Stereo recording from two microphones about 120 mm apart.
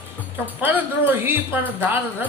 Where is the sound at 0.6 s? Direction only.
15° right (ahead or behind).